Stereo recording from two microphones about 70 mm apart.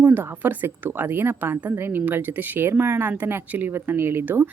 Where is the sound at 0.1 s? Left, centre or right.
Right.